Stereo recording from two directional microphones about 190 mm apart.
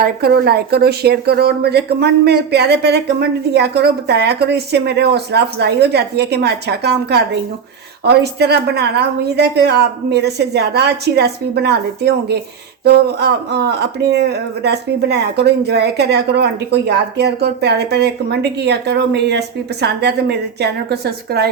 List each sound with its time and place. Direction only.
0.0 s speech: 55° right (ahead or behind)